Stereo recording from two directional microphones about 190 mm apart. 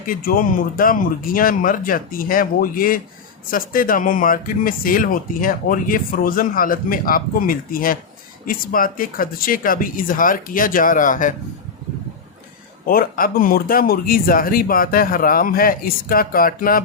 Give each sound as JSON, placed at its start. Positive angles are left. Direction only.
{"t": 0.1, "sound": "speech", "side_deg": 50}
{"t": 12.9, "sound": "speech", "side_deg": 50}